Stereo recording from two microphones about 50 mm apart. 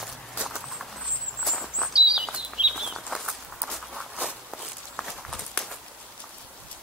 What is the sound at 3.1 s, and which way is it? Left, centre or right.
Walk, centre.